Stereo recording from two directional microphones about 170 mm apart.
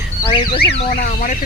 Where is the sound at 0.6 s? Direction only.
60° left (ahead or behind).